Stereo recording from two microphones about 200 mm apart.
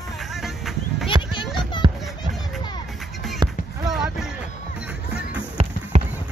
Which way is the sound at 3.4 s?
20° right (ahead or behind).